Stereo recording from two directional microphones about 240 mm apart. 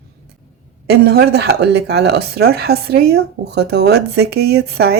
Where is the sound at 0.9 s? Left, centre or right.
Right.